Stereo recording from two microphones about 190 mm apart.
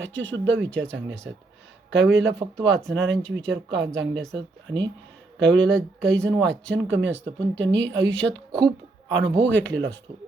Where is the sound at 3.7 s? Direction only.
70° right (ahead or behind).